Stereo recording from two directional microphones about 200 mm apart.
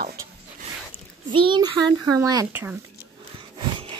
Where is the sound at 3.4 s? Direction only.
25° right (ahead or behind).